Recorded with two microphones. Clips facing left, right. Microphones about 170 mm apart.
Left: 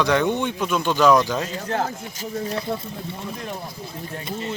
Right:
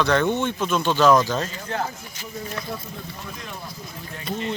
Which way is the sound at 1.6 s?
40° left (ahead or behind).